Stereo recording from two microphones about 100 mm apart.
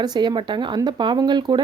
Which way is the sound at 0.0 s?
50° right (ahead or behind).